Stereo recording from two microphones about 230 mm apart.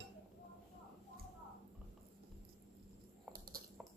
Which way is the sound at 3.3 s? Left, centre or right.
Right.